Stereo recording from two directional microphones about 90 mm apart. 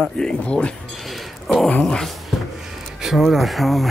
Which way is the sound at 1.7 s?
10° left (ahead or behind).